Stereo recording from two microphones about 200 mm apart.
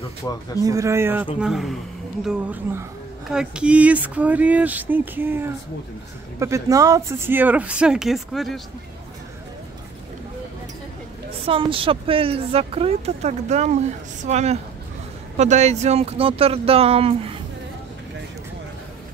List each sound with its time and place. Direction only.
0.7 s speech: 15° right (ahead or behind); by 8.5 s centre (ahead or behind)
11.4 s speech: 25° right (ahead or behind)